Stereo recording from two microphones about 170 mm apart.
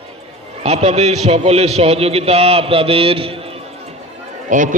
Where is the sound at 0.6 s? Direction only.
40° right (ahead or behind).